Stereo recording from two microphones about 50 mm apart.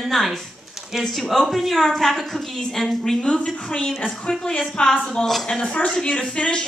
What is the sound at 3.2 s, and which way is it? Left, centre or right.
A woman's voice, centre.